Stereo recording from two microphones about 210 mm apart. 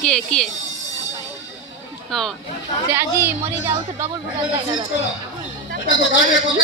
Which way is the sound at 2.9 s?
10° right (ahead or behind).